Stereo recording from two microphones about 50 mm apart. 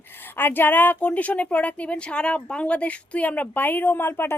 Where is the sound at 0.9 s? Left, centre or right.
Left.